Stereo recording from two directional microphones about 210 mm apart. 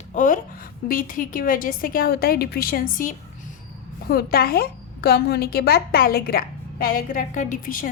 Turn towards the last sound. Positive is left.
turn(degrees=40)  # may be behind; listen again after turning